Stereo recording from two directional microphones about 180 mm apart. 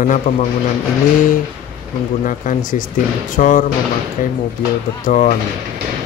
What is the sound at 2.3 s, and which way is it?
Speech, 50° left (ahead or behind).